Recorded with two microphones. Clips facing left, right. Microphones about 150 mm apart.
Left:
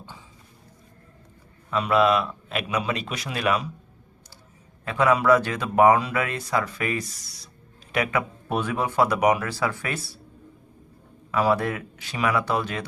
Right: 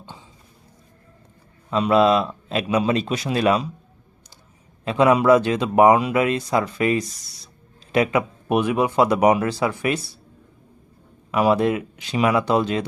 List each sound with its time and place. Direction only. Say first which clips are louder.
1.7 s speech: right 4 dB; 25° right (ahead or behind)
4.9 s speech: right 4 dB; 20° right (ahead or behind)
11.3 s speech: right 4 dB; 20° right (ahead or behind)